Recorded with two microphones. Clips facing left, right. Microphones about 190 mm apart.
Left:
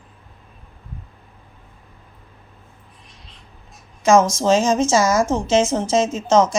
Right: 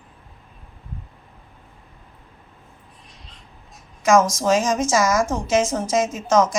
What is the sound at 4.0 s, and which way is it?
A woman's voice, 25° left (ahead or behind).